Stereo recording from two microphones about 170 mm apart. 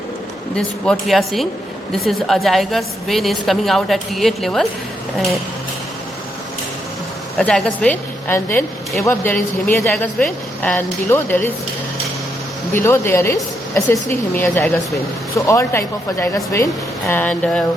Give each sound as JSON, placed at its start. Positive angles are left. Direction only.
{"t": 0.5, "sound": "a woman's voice", "side_deg": 0}
{"t": 7.3, "sound": "speech", "side_deg": 5}
{"t": 12.7, "sound": "speech", "side_deg": 15}